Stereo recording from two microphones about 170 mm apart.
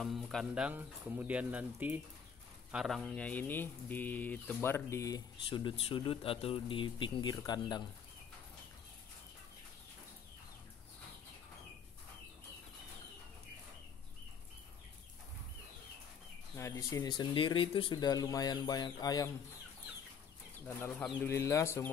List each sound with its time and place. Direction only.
0.0 s speech: centre (ahead or behind); by 7.8 s 25° left (ahead or behind)
16.5 s speech: 15° left (ahead or behind)
20.6 s speech: 10° left (ahead or behind)